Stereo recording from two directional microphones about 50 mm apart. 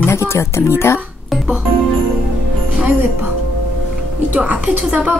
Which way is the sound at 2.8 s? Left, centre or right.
Right.